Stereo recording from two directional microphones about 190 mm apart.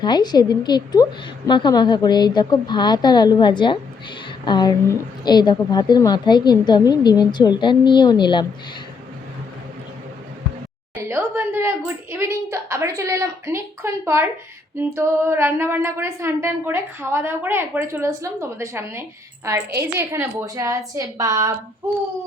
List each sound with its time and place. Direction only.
0.0 s speech: 20° left (ahead or behind)
11.1 s a woman's voice: 10° right (ahead or behind)